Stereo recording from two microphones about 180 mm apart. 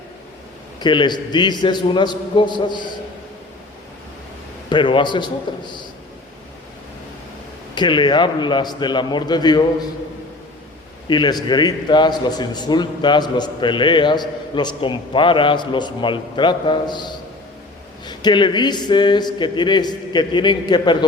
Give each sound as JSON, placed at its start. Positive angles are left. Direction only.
{"t": 0.8, "sound": "a man's voice", "side_deg": 25}
{"t": 4.7, "sound": "a man's voice", "side_deg": 25}
{"t": 7.8, "sound": "a man's voice", "side_deg": 25}
{"t": 11.1, "sound": "a man's voice", "side_deg": 25}